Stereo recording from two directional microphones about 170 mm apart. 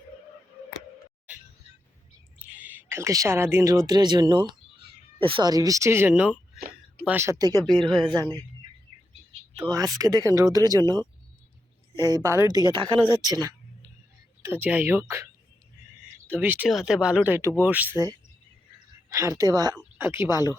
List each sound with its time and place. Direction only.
2.4 s speech: 10° right (ahead or behind)
7.8 s speech: centre (ahead or behind)
8.1 s speech: 25° right (ahead or behind)
9.6 s speech: 25° right (ahead or behind)
12.2 s speech: 15° right (ahead or behind)
14.4 s speech: 10° right (ahead or behind)
16.3 s speech: 10° right (ahead or behind)
19.1 s speech: 20° right (ahead or behind)
19.7 s speech: 10° right (ahead or behind)